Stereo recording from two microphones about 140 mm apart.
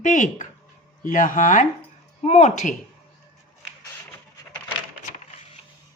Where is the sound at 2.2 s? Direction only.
55° left (ahead or behind).